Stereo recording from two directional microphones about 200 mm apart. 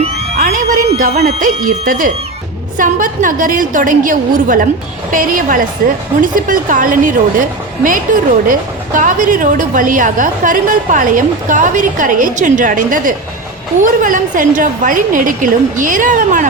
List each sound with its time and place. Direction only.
0.3 s a woman's voice: 40° right (ahead or behind)